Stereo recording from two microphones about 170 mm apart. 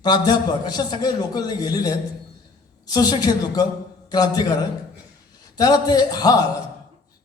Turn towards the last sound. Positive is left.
turn(degrees=20)  # may be behind; listen again after turning